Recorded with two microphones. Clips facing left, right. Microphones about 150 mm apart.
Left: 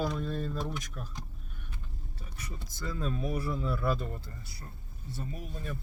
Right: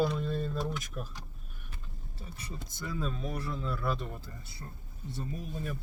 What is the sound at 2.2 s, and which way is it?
Speech, 30° right (ahead or behind).